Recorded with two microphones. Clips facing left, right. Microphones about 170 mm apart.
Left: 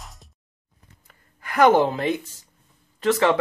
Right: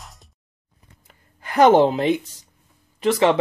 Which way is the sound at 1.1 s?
25° right (ahead or behind).